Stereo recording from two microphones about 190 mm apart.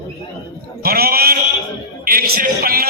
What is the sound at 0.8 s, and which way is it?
A man's voice, 50° right (ahead or behind).